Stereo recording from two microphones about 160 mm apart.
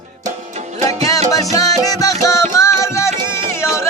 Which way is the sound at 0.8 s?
40° right (ahead or behind).